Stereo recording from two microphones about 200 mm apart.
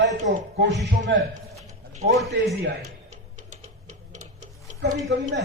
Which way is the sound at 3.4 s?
35° right (ahead or behind).